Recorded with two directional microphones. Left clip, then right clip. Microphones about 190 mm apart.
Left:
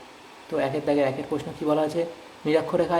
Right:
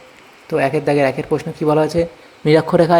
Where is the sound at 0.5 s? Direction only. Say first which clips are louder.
Right 8 dB; 35° right (ahead or behind).